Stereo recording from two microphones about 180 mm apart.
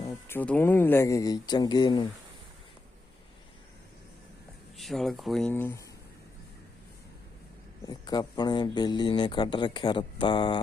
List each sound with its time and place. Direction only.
0.3 s speech: 10° left (ahead or behind)
4.8 s speech: centre (ahead or behind)
7.9 s speech: 20° left (ahead or behind)